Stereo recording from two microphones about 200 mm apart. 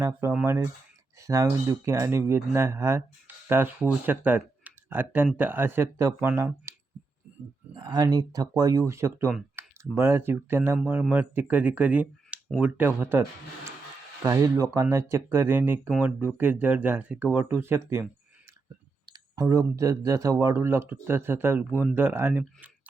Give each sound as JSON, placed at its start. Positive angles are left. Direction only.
{"t": 0.0, "sound": "speech", "side_deg": -10}
{"t": 7.7, "sound": "speech", "side_deg": -20}
{"t": 14.3, "sound": "speech", "side_deg": -15}